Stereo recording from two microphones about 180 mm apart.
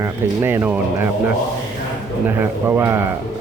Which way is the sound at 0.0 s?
15° right (ahead or behind).